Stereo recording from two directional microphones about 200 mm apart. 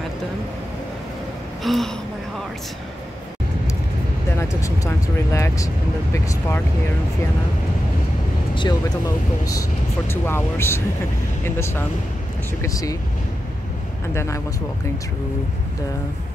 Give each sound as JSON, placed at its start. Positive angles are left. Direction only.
{"t": 1.6, "sound": "speech", "side_deg": 0}
{"t": 4.4, "sound": "speech", "side_deg": 15}
{"t": 8.5, "sound": "speech", "side_deg": 20}
{"t": 14.1, "sound": "speech", "side_deg": 15}